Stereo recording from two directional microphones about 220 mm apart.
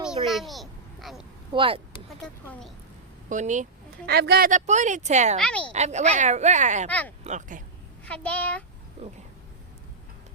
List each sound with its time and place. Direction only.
0.3 s a sound: centre (ahead or behind)
1.5 s speech: 25° right (ahead or behind)
2.0 s speech: 5° left (ahead or behind)
3.2 s speech: 35° right (ahead or behind)
5.4 s speech: 5° left (ahead or behind)
5.7 s speech: 30° right (ahead or behind)
8.0 s a child's voice: 5° left (ahead or behind)